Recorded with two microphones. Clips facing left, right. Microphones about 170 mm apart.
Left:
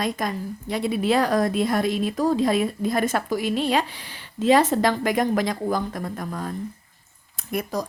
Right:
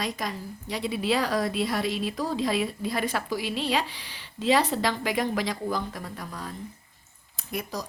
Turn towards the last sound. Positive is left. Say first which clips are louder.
# left 6 dB
turn(degrees=50)  # may be behind; listen again after turning